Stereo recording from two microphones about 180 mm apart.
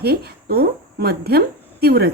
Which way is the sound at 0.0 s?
60° right (ahead or behind).